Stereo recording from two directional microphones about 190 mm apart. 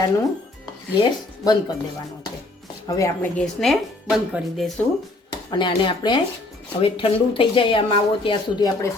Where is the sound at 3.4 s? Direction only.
Centre (ahead or behind).